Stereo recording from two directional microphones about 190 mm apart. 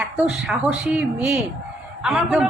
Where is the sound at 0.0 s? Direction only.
Centre (ahead or behind).